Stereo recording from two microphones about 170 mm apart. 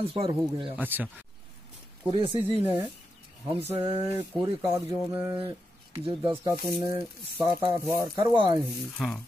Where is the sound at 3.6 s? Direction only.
15° right (ahead or behind).